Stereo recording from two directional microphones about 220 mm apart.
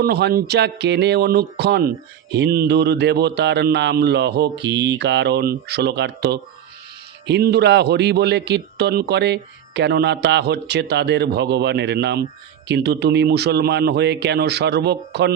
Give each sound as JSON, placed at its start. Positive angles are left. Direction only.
{"t": 0.0, "sound": "a man's voice", "side_deg": -45}